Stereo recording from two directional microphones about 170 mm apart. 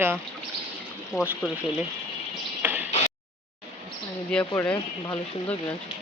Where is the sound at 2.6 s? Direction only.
10° right (ahead or behind).